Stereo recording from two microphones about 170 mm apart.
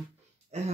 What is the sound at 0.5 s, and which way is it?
Speech, 40° right (ahead or behind).